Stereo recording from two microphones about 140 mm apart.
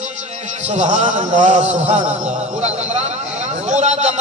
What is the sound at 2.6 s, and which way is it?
A man's voice, 50° right (ahead or behind).